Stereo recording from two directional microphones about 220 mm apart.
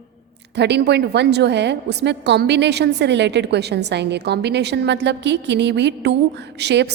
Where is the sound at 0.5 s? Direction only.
50° right (ahead or behind).